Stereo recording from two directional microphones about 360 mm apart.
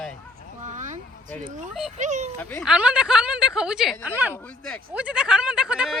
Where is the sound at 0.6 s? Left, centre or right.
Centre.